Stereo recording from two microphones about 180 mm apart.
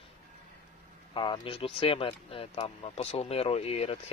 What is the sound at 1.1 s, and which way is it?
Speech, 25° left (ahead or behind).